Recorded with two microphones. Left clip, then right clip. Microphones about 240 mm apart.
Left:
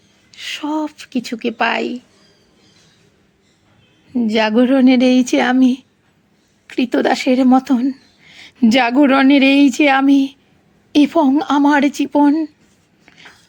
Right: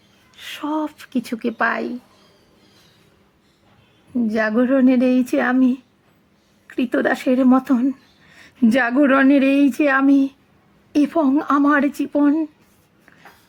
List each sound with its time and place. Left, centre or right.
0.3 s speech: centre
4.2 s a woman's voice: centre